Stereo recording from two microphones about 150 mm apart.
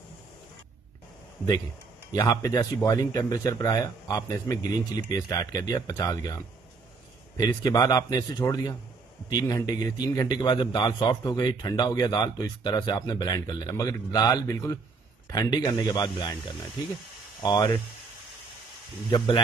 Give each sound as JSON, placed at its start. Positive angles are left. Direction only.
{"t": 2.1, "sound": "a man's voice", "side_deg": 25}
{"t": 17.4, "sound": "a man's voice", "side_deg": 30}
{"t": 19.0, "sound": "speech", "side_deg": 35}